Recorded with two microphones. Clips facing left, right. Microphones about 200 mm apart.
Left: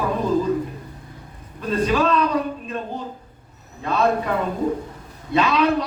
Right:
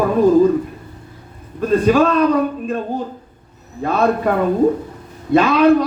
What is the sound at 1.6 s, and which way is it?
A man's voice, 50° right (ahead or behind).